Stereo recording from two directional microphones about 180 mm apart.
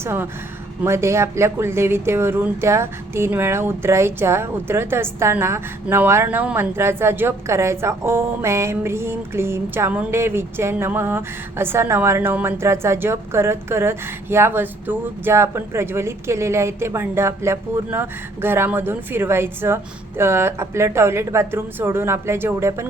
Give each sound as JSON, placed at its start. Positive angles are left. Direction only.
{"t": 0.0, "sound": "speech", "side_deg": -15}